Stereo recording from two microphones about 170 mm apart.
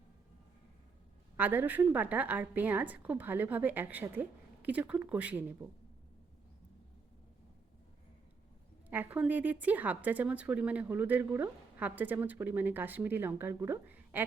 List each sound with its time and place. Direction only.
1.4 s speech: 10° right (ahead or behind)
8.9 s speech: 10° right (ahead or behind)